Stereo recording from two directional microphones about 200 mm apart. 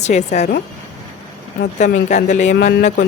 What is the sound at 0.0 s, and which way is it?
Speech, 35° left (ahead or behind).